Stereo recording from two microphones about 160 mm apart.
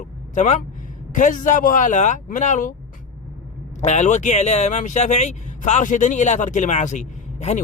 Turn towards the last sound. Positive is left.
turn(degrees=45)  # may be behind; listen again after turning